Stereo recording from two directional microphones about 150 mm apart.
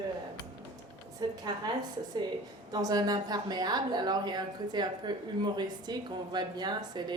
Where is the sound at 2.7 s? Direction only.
25° right (ahead or behind).